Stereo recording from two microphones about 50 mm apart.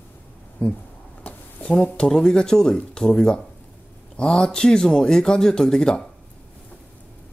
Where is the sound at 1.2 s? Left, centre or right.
Left.